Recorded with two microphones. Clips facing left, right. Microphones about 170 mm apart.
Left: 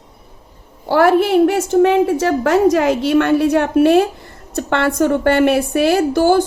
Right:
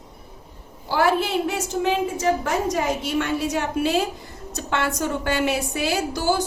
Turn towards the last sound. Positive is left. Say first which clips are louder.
# left 10 dB
turn(degrees=55)  # may be behind; listen again after turning